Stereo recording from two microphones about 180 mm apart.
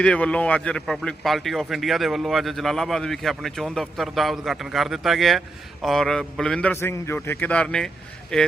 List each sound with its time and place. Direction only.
0.0 s a man's voice: 5° left (ahead or behind)